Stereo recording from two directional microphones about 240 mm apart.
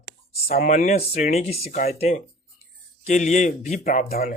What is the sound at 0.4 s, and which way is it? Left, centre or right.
Speech, left.